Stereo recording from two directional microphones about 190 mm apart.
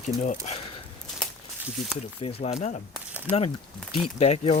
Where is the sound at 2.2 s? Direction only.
30° left (ahead or behind).